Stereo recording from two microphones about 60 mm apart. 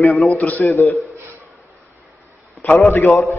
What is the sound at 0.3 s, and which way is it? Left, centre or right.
Speech, left.